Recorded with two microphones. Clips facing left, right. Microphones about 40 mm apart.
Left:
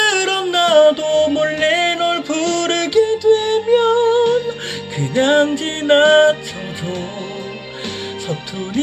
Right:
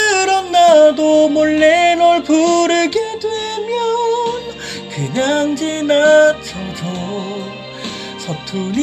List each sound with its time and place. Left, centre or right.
0.0 s music: centre